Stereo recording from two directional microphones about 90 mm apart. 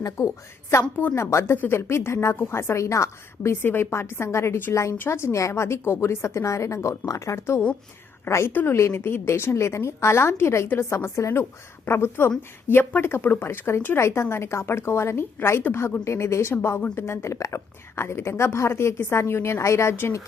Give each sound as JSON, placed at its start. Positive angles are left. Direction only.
{"t": 0.2, "sound": "a woman's voice", "side_deg": 35}